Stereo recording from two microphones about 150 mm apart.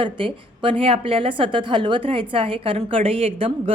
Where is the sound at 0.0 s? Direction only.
35° right (ahead or behind).